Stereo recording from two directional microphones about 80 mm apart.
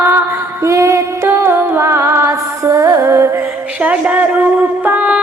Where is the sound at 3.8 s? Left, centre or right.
Centre.